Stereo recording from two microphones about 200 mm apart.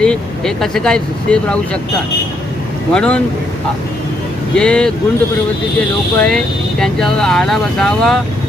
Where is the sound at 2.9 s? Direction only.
5° left (ahead or behind).